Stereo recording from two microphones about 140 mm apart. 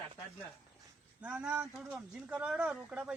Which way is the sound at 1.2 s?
10° right (ahead or behind).